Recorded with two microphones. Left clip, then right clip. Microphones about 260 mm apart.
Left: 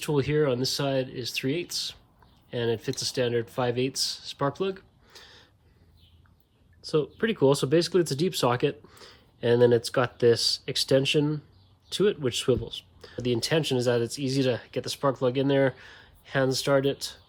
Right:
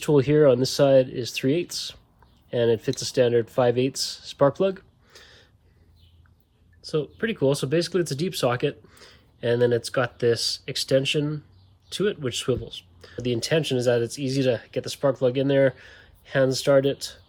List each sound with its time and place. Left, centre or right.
0.0 s speech: centre
6.8 s speech: centre